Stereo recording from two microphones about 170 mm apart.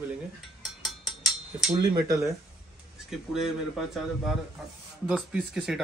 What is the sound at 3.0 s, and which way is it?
Speech, centre (ahead or behind).